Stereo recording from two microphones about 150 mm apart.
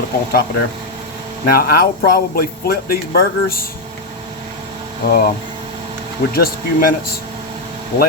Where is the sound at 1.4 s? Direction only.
90° left.